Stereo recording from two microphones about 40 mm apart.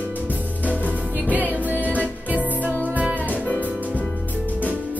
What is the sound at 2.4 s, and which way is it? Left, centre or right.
Music, right.